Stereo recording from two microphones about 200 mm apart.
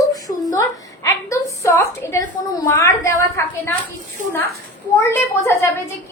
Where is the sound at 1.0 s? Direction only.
15° left (ahead or behind).